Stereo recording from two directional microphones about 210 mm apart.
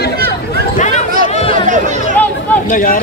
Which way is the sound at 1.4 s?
25° left (ahead or behind).